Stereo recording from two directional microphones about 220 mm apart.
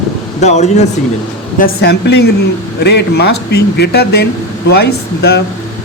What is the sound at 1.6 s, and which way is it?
Speech, 50° left (ahead or behind).